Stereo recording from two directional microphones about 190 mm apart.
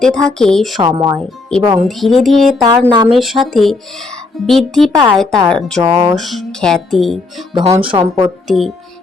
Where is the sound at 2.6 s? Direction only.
20° right (ahead or behind).